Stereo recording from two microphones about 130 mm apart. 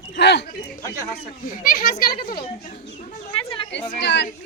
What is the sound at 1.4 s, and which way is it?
Speech, 90° left.